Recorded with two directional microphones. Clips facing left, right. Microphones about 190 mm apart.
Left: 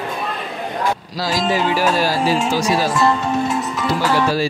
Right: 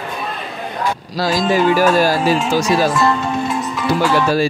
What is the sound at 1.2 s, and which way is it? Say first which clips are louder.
Speech: right 4 dB; 50° right (ahead or behind).